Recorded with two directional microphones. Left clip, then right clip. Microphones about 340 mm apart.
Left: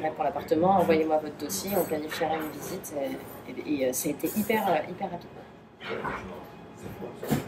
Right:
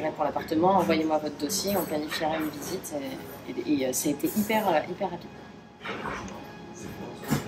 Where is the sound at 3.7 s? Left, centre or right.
Centre.